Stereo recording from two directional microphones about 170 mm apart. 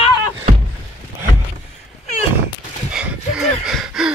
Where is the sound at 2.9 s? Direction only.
5° right (ahead or behind).